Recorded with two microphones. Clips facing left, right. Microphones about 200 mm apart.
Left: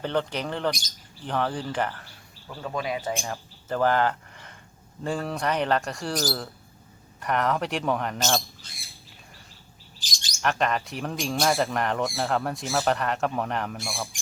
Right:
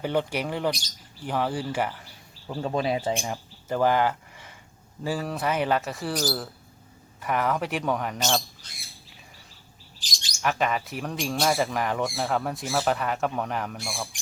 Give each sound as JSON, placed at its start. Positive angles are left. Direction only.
{"t": 0.0, "sound": "speech", "side_deg": -10}
{"t": 2.5, "sound": "speech", "side_deg": -30}
{"t": 3.1, "sound": "speech", "side_deg": -15}
{"t": 10.4, "sound": "speech", "side_deg": -5}